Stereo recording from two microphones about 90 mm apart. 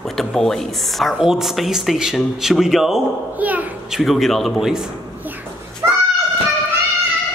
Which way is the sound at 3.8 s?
Centre (ahead or behind).